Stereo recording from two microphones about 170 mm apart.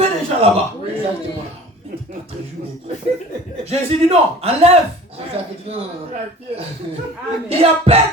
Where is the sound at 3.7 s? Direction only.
40° right (ahead or behind).